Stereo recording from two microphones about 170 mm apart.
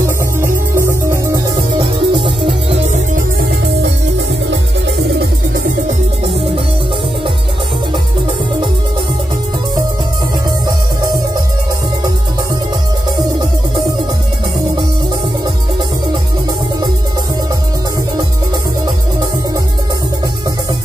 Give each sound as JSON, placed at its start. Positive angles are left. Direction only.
{"t": 0.4, "sound": "music", "side_deg": -15}
{"t": 1.8, "sound": "music", "side_deg": -25}
{"t": 4.5, "sound": "music", "side_deg": -90}